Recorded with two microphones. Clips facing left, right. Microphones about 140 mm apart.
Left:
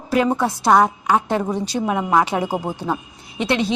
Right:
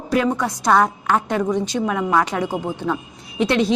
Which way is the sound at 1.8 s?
20° left (ahead or behind).